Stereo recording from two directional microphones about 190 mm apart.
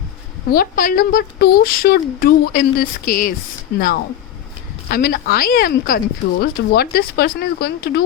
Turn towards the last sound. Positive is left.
turn(degrees=55)  # may be behind; listen again after turning